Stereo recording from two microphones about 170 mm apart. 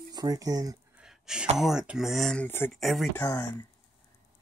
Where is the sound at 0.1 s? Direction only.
20° right (ahead or behind).